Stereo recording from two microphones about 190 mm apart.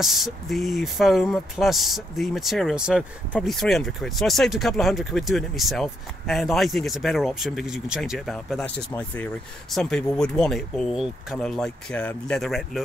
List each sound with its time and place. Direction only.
0.0 s speech: centre (ahead or behind)